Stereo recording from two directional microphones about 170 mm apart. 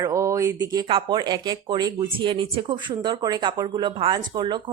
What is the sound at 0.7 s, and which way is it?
A woman's voice, 25° right (ahead or behind).